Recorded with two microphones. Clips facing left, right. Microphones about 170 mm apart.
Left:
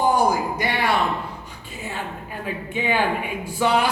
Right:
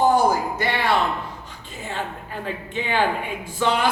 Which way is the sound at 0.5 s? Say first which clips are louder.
Even; 10° left (ahead or behind).